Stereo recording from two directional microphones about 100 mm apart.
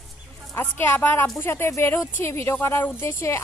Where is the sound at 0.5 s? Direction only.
20° left (ahead or behind).